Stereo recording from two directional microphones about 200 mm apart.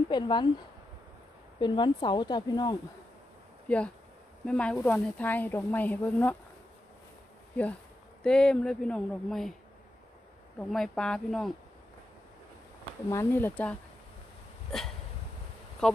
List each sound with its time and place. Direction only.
0.1 s speech: 20° left (ahead or behind)
1.6 s speech: 20° left (ahead or behind)
3.6 s speech: 5° left (ahead or behind)
8.2 s speech: 5° left (ahead or behind)
10.6 s speech: 5° left (ahead or behind)
13.1 s speech: 10° left (ahead or behind)
15.8 s speech: centre (ahead or behind)